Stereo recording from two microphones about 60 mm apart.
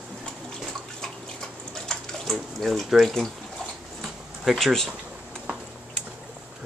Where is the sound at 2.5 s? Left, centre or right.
Centre.